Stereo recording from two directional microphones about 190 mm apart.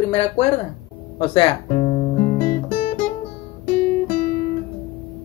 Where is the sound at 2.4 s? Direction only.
30° left (ahead or behind).